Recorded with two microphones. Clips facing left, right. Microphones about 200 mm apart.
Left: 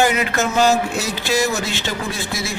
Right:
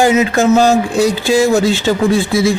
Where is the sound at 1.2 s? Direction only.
30° right (ahead or behind).